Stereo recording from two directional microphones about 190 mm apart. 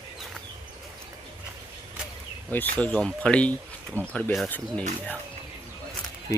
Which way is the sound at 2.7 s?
5° left (ahead or behind).